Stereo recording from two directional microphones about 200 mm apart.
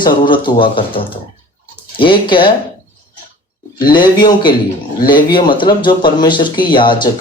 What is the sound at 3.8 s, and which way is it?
Speech, 20° left (ahead or behind).